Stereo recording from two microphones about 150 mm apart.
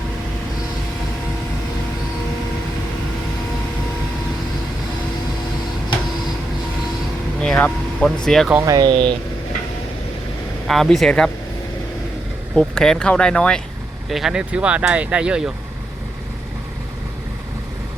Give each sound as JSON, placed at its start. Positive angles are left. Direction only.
{"t": 7.4, "sound": "speech", "side_deg": 5}
{"t": 8.5, "sound": "speech", "side_deg": -20}
{"t": 10.7, "sound": "speech", "side_deg": 0}
{"t": 12.5, "sound": "speech", "side_deg": 5}